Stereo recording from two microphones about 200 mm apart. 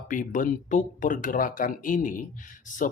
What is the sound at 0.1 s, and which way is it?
Speech, 40° left (ahead or behind).